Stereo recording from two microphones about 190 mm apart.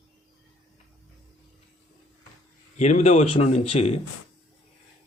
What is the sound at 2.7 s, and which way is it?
Speech, 35° left (ahead or behind).